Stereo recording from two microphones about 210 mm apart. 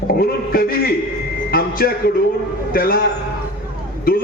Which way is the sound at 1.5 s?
45° left (ahead or behind).